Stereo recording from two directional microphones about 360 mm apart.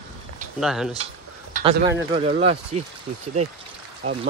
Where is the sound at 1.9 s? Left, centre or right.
Centre.